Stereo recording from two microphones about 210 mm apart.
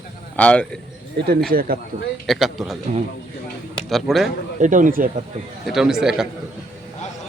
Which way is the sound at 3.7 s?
Centre (ahead or behind).